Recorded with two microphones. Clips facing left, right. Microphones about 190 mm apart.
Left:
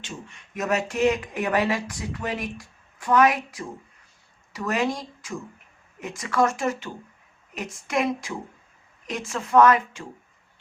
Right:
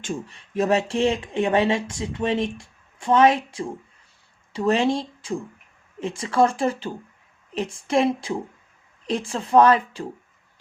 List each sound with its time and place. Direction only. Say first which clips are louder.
0.3 s speech: right 4 dB; 30° right (ahead or behind)